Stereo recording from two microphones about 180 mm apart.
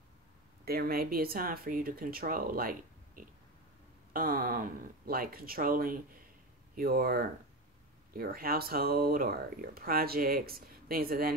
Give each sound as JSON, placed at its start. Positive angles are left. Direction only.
{"t": 0.7, "sound": "speech", "side_deg": -55}